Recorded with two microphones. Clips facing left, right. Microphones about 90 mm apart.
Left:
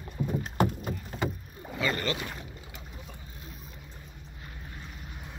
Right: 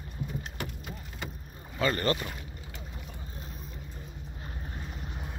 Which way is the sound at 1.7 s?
40° right (ahead or behind).